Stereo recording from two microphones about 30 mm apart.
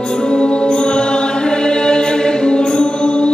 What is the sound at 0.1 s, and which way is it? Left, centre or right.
Music, left.